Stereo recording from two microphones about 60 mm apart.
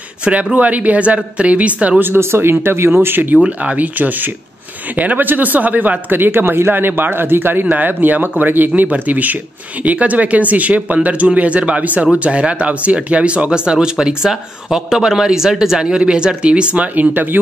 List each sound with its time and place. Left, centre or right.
0.2 s speech: centre
2.0 s speech: right
3.3 s speech: centre